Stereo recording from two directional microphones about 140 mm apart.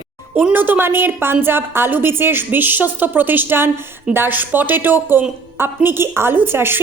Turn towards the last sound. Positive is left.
turn(degrees=-15)  # may be behind; listen again after turning